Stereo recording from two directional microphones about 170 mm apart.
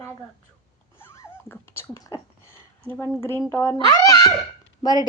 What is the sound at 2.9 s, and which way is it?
A woman's voice, 15° left (ahead or behind).